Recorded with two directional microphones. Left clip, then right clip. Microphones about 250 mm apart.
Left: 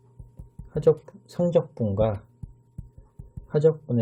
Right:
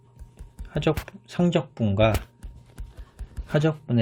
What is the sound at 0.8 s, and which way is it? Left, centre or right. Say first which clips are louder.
Speech: left 6 dB; right.